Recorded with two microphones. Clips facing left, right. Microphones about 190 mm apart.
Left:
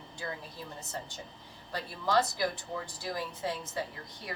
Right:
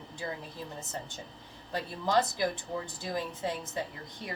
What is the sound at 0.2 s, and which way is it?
Speech, 25° right (ahead or behind).